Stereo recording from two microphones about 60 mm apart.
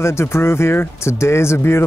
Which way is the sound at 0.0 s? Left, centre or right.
Left.